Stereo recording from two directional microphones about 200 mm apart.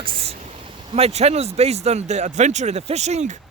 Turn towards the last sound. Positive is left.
turn(degrees=-35)  # may be behind; listen again after turning